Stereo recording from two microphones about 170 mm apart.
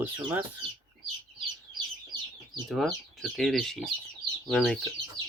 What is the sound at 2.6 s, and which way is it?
Speech, centre (ahead or behind).